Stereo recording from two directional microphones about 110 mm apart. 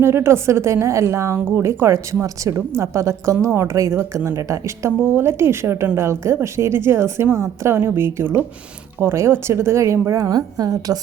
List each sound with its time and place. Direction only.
0.0 s a woman's voice: 25° right (ahead or behind)